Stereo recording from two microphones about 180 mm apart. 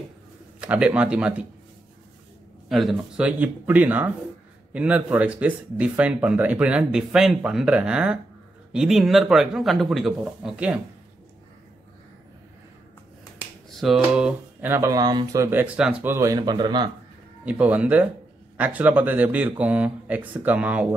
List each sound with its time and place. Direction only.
0.6 s speech: 5° right (ahead or behind)
2.7 s speech: centre (ahead or behind)
13.7 s speech: centre (ahead or behind); by 16.9 s 25° right (ahead or behind)
17.5 s speech: 5° right (ahead or behind)